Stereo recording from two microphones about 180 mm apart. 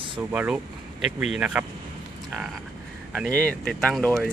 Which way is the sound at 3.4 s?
5° left (ahead or behind).